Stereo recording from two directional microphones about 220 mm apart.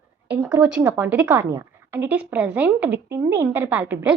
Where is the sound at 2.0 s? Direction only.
5° right (ahead or behind).